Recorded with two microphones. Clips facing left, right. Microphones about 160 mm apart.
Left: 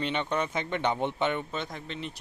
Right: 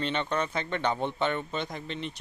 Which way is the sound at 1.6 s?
Centre (ahead or behind).